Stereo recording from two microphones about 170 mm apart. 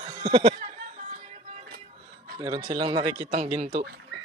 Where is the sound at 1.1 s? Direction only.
45° right (ahead or behind).